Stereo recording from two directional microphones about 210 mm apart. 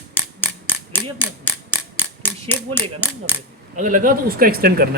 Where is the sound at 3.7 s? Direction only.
35° right (ahead or behind).